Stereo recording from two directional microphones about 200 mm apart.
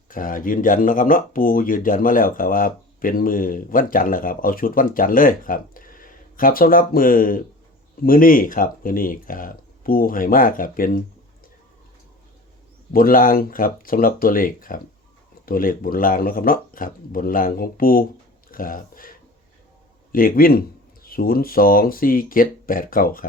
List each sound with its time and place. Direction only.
0.1 s speech: 45° left (ahead or behind)
12.9 s speech: 45° left (ahead or behind)
20.1 s speech: 45° left (ahead or behind)